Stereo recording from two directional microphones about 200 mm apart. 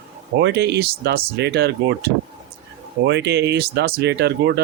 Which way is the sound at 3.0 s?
60° right (ahead or behind).